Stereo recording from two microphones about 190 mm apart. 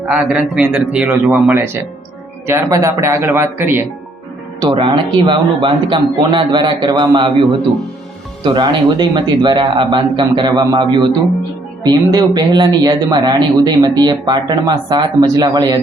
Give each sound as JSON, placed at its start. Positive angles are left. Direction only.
{"t": 0.0, "sound": "a man's voice", "side_deg": 0}
{"t": 4.6, "sound": "speech", "side_deg": -25}
{"t": 8.4, "sound": "speech", "side_deg": -25}